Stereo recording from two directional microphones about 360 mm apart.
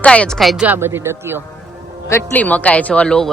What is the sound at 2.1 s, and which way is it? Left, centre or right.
Speech, centre.